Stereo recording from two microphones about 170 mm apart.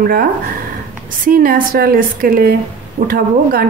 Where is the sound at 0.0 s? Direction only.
60° right (ahead or behind).